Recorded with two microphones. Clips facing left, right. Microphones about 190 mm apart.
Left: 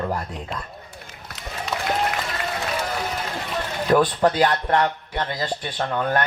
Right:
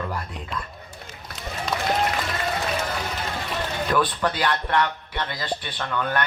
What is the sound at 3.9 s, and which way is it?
A man's voice, 45° left (ahead or behind).